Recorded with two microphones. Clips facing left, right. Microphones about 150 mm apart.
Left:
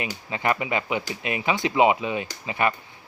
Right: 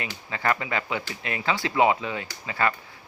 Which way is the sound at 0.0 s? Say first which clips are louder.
Left 2 dB; 20° left (ahead or behind).